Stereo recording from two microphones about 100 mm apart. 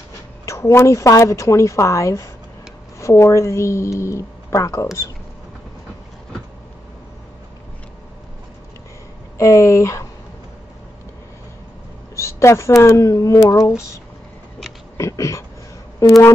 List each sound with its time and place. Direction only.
0.5 s speech: 25° left (ahead or behind)
9.4 s speech: 30° left (ahead or behind)
12.2 s speech: 30° left (ahead or behind)
15.0 s speech: 30° left (ahead or behind)